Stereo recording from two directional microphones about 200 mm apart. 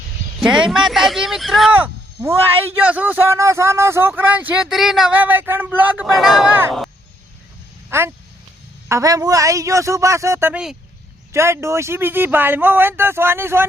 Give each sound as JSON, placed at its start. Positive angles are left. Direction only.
{"t": 0.3, "sound": "a sound", "side_deg": -5}
{"t": 2.8, "sound": "speech", "side_deg": -10}
{"t": 7.9, "sound": "speech", "side_deg": -10}